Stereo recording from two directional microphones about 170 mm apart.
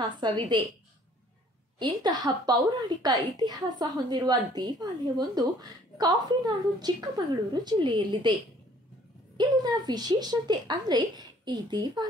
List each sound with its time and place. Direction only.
0.0 s speech: 25° right (ahead or behind)
1.8 s speech: 25° right (ahead or behind)
9.4 s speech: 25° right (ahead or behind)